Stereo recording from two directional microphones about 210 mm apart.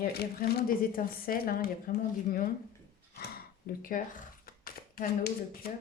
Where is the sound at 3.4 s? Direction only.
45° left (ahead or behind).